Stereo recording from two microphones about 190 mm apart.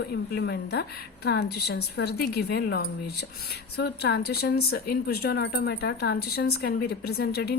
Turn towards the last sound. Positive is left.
turn(degrees=55)  # may be behind; listen again after turning